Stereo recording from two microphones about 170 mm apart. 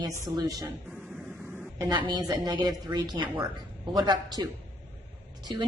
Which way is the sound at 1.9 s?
25° right (ahead or behind).